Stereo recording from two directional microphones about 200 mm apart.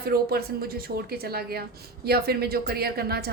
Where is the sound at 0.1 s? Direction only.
50° right (ahead or behind).